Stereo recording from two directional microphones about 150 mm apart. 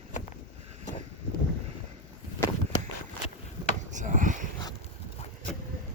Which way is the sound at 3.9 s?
55° right (ahead or behind).